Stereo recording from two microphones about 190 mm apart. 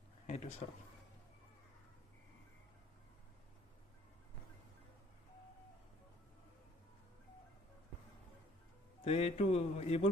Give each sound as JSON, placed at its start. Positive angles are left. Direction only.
{"t": 0.3, "sound": "speech", "side_deg": 35}
{"t": 9.0, "sound": "speech", "side_deg": 30}